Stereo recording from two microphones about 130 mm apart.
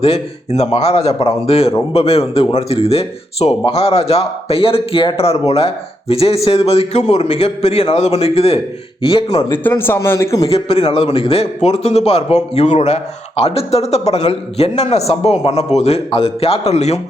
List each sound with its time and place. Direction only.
0.0 s a man's voice: 55° left (ahead or behind)
9.5 s speech: 15° left (ahead or behind)
10.5 s a man's voice: 50° left (ahead or behind)